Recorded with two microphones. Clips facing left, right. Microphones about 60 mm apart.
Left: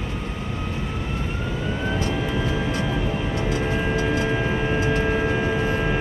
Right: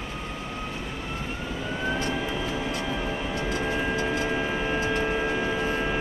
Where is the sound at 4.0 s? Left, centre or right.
Left.